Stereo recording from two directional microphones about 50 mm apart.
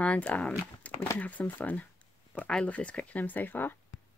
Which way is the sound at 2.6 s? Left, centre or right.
Left.